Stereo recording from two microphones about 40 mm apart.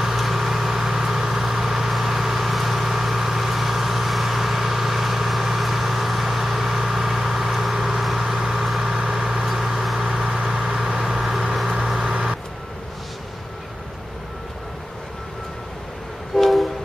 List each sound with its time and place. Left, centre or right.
0.0 s vehicle: centre
10.3 s vehicle: right
16.3 s train: centre